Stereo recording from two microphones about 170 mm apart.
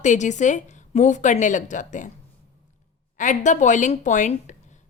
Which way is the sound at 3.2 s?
45° left (ahead or behind).